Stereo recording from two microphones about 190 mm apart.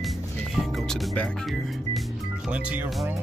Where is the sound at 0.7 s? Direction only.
Centre (ahead or behind).